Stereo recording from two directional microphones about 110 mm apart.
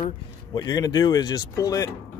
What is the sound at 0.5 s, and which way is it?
Speech, 35° left (ahead or behind).